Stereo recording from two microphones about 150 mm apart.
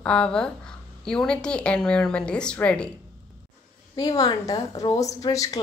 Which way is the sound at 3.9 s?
25° left (ahead or behind).